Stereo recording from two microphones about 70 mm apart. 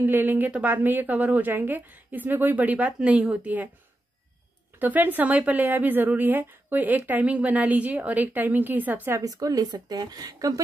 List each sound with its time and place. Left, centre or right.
0.0 s speech: right
4.7 s speech: right
9.2 s speech: right